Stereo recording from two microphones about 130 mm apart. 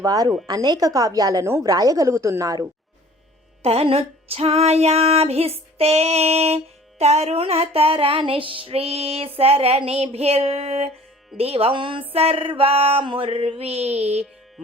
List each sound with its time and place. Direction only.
0.0 s a woman's voice: 30° right (ahead or behind)
3.6 s music: 50° right (ahead or behind)